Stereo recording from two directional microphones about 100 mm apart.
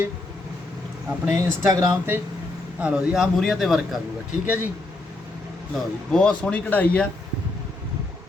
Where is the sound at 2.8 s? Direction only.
10° right (ahead or behind).